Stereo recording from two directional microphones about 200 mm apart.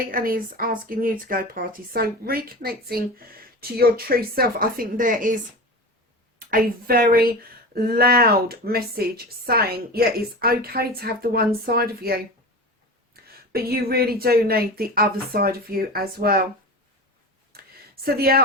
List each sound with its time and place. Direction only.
0.0 s speech: 45° right (ahead or behind)
6.4 s speech: 45° right (ahead or behind)
17.5 s a sound: 50° right (ahead or behind)